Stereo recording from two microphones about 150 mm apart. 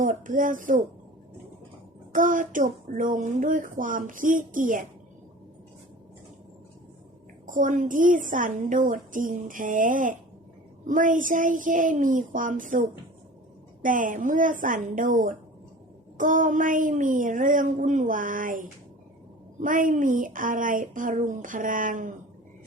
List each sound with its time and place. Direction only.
0.0 s speech: 60° right (ahead or behind)
2.1 s speech: 60° right (ahead or behind)
7.4 s speech: 60° right (ahead or behind)